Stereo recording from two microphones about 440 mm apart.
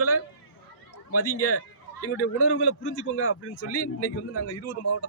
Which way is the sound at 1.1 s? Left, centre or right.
Left.